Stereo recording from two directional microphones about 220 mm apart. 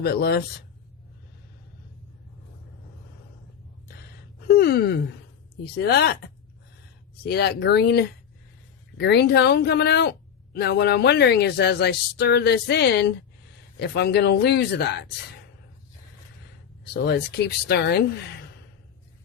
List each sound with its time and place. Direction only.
0.0 s a woman's voice: 45° left (ahead or behind)
4.4 s a sound: 45° left (ahead or behind)
5.7 s a woman's voice: 45° left (ahead or behind)
16.9 s a woman's voice: 50° left (ahead or behind)